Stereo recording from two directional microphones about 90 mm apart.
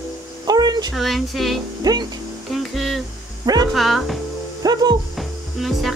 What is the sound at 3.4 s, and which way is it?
Speech, 50° right (ahead or behind).